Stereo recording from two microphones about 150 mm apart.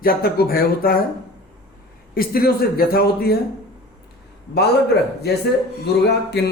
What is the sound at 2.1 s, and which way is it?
A man's voice, 80° left.